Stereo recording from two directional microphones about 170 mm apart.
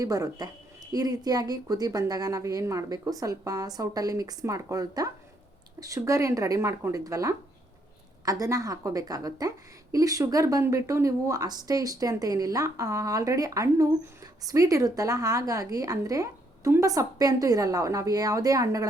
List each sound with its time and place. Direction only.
0.0 s speech: 20° right (ahead or behind)